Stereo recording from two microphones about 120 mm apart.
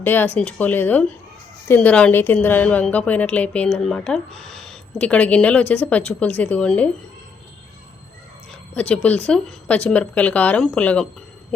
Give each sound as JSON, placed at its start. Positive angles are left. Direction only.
{"t": 0.0, "sound": "a woman's voice", "side_deg": 15}
{"t": 8.7, "sound": "a woman's voice", "side_deg": 10}